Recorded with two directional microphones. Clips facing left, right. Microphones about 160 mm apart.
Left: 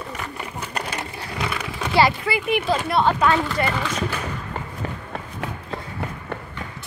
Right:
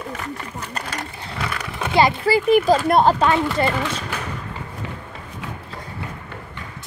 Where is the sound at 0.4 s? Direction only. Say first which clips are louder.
Left 1 dB; 10° left (ahead or behind).